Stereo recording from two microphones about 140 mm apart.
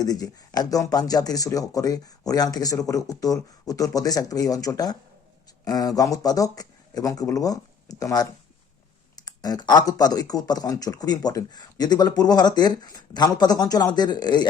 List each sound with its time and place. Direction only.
0.0 s speech: 30° left (ahead or behind)